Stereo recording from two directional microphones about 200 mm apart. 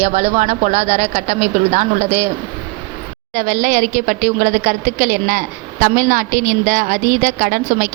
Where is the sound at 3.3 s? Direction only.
45° right (ahead or behind).